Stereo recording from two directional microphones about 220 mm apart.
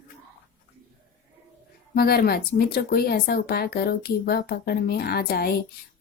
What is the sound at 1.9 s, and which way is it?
Speech, 45° left (ahead or behind).